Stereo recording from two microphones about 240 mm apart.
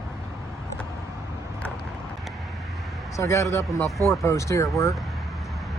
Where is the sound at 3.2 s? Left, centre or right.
Centre.